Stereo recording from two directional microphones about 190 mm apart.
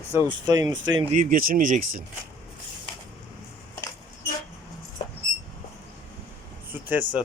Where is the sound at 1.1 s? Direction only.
45° right (ahead or behind).